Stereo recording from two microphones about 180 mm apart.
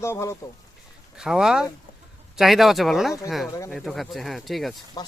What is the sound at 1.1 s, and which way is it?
Speech, 5° right (ahead or behind).